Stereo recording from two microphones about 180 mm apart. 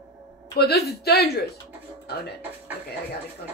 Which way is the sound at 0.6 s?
65° left (ahead or behind).